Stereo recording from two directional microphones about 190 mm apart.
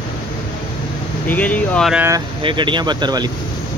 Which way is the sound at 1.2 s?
10° left (ahead or behind).